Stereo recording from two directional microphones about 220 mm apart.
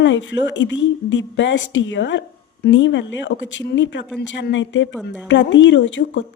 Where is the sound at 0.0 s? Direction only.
55° left (ahead or behind).